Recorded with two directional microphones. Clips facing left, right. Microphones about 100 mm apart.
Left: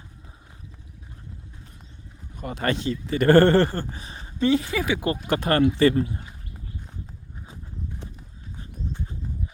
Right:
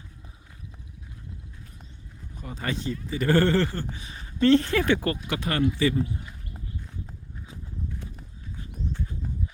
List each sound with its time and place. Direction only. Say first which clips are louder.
2.4 s speech: left 6 dB; 65° left (ahead or behind); by 4.3 s 35° left (ahead or behind)
4.4 s speech: right 2 dB; 10° left (ahead or behind)
5.1 s speech: left 6 dB; 45° left (ahead or behind); by 6.2 s 65° left (ahead or behind)
7.5 s horse: right 1 dB; 20° left (ahead or behind)